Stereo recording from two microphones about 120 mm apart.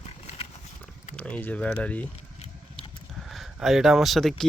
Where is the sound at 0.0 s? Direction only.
60° left (ahead or behind).